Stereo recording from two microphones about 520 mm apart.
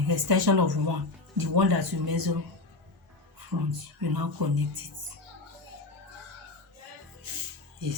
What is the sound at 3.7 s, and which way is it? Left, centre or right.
Speech, right.